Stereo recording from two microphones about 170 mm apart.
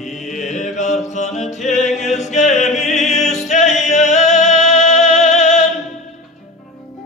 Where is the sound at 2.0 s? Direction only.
40° left (ahead or behind).